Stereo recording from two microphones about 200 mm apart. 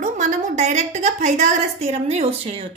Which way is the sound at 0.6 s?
35° right (ahead or behind).